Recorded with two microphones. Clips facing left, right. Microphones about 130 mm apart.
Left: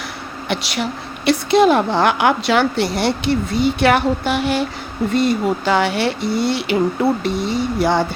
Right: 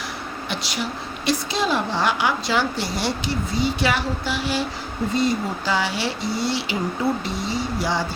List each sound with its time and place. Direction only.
0.4 s a woman's voice: 65° left (ahead or behind)